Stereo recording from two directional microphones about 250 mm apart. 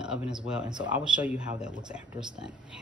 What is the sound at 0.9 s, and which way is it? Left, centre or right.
Speech, centre.